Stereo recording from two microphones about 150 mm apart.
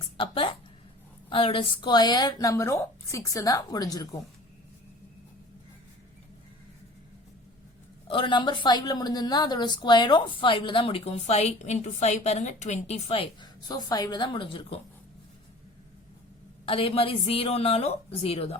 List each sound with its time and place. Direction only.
0.2 s a woman's voice: 35° left (ahead or behind)
8.0 s a woman's voice: 35° left (ahead or behind)
16.6 s a woman's voice: 40° left (ahead or behind)